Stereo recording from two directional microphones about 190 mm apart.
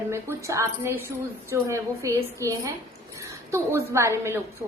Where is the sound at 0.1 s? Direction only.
15° right (ahead or behind).